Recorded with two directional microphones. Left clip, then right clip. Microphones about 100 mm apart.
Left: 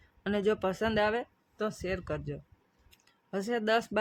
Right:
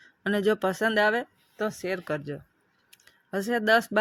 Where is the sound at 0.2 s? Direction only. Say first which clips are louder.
Right 5 dB; 35° right (ahead or behind).